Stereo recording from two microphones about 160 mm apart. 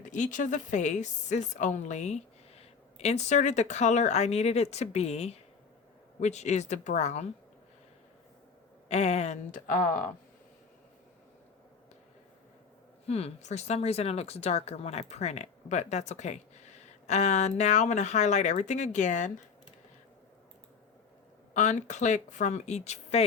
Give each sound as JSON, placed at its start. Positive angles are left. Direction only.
{"t": 0.0, "sound": "speech", "side_deg": 50}
{"t": 8.9, "sound": "speech", "side_deg": 45}
{"t": 13.1, "sound": "speech", "side_deg": 40}
{"t": 21.5, "sound": "speech", "side_deg": 50}